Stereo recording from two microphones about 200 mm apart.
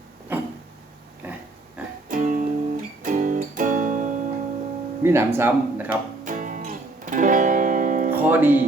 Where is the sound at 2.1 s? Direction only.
40° right (ahead or behind).